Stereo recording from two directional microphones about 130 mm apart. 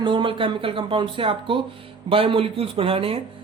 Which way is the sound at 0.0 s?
40° right (ahead or behind).